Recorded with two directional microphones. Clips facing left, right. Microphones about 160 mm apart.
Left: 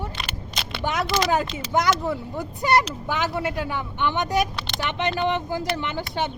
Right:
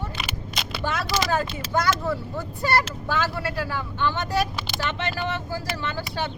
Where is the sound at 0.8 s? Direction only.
20° left (ahead or behind).